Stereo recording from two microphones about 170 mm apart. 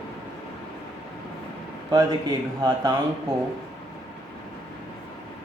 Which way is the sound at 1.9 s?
25° right (ahead or behind).